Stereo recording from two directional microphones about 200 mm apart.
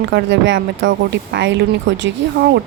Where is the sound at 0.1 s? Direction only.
65° right (ahead or behind).